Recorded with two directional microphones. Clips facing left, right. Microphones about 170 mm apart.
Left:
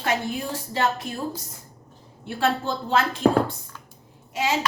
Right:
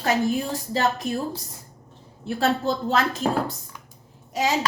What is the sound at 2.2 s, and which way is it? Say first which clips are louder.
A woman's voice: right 2 dB; 40° right (ahead or behind).